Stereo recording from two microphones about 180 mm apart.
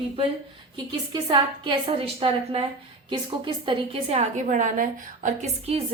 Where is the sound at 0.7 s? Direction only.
25° right (ahead or behind).